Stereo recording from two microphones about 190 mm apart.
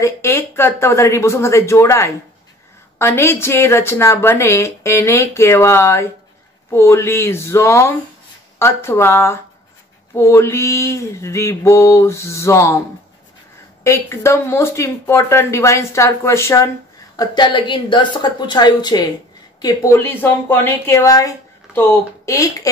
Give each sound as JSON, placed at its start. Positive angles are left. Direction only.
{"t": 0.0, "sound": "a woman's voice", "side_deg": 15}
{"t": 13.8, "sound": "a woman's voice", "side_deg": 15}